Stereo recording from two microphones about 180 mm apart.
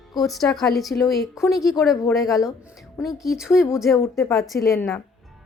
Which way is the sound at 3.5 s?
15° left (ahead or behind).